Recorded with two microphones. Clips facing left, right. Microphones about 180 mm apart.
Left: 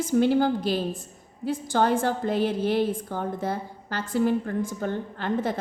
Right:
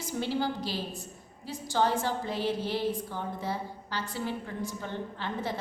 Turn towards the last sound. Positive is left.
turn(degrees=50)  # may be behind; listen again after turning